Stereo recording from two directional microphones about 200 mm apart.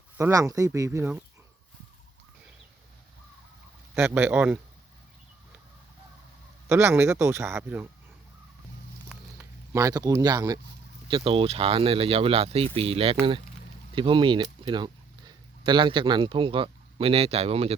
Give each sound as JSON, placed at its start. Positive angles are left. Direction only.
{"t": 0.2, "sound": "speech", "side_deg": -15}
{"t": 4.0, "sound": "speech", "side_deg": -10}
{"t": 6.7, "sound": "speech", "side_deg": -10}
{"t": 9.0, "sound": "a sound", "side_deg": -15}
{"t": 11.1, "sound": "a man's voice", "side_deg": -25}